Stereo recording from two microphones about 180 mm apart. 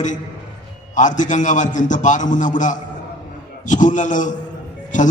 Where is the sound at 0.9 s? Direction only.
45° left (ahead or behind).